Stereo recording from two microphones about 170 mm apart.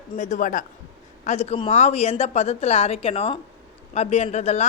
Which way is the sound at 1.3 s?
40° left (ahead or behind).